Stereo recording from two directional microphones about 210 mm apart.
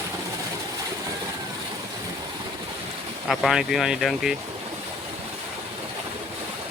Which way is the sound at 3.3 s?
Centre (ahead or behind).